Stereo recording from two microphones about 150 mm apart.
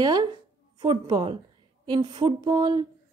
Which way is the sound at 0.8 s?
30° right (ahead or behind).